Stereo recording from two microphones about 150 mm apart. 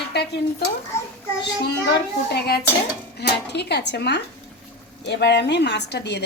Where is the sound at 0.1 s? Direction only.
90° left.